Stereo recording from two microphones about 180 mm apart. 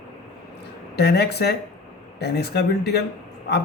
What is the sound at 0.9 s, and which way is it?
A man's voice, 65° left (ahead or behind).